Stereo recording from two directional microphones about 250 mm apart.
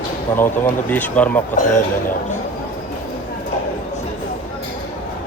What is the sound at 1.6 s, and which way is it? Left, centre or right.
Speech, left.